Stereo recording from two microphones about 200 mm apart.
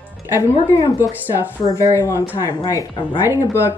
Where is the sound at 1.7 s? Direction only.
15° left (ahead or behind).